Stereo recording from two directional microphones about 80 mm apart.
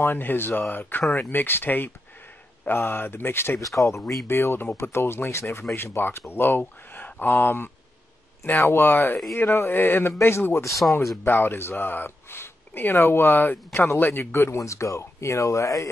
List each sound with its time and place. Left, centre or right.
0.0 s speech: left